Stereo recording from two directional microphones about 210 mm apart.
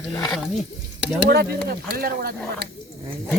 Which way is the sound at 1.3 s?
50° right (ahead or behind).